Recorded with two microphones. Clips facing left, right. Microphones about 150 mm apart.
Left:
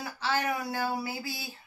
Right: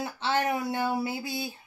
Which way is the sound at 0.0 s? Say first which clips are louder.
Right 3 dB; 25° right (ahead or behind).